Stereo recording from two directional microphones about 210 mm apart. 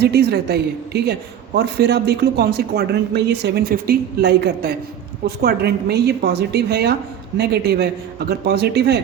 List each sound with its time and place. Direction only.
0.0 s speech: 50° right (ahead or behind)